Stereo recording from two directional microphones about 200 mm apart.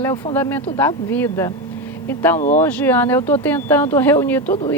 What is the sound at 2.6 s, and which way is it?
A woman's voice, 10° left (ahead or behind).